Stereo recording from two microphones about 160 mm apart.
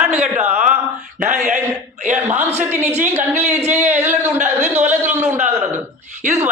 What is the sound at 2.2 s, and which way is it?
A man's voice, 15° right (ahead or behind).